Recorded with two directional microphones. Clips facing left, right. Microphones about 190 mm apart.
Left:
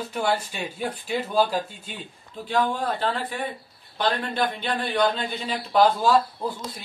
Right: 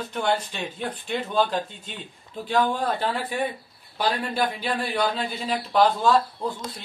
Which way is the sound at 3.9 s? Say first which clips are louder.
Even; 10° right (ahead or behind).